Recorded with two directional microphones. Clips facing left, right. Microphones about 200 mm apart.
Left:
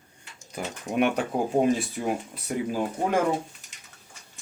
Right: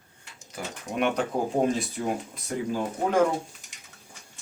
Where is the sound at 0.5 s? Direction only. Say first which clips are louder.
Left 4 dB; 10° left (ahead or behind).